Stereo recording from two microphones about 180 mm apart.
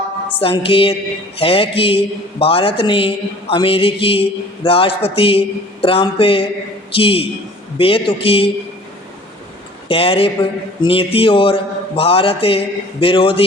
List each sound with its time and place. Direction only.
0.3 s a man's voice: 30° left (ahead or behind)
9.9 s a man's voice: 30° left (ahead or behind)